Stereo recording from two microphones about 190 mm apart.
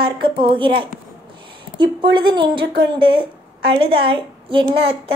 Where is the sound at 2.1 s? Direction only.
25° right (ahead or behind).